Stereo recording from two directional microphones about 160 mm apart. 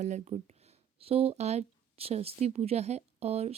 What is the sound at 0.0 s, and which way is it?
Speech, 45° right (ahead or behind).